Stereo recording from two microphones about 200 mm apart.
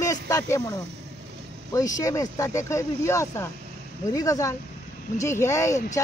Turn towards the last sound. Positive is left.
turn(degrees=15)  # may be behind; listen again after turning